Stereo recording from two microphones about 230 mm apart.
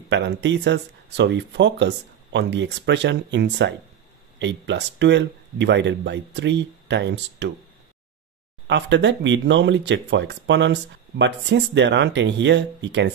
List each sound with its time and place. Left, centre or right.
0.1 s speech: right
8.6 s speech: right